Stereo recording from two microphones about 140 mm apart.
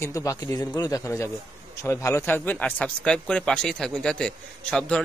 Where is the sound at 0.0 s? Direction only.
25° left (ahead or behind).